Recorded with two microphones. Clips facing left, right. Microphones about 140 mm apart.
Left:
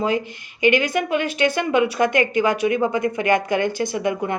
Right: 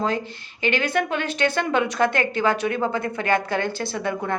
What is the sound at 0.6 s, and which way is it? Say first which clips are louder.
A woman's voice: left 4 dB; 10° left (ahead or behind).